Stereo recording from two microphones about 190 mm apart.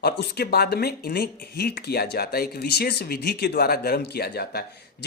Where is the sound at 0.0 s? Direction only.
55° left (ahead or behind).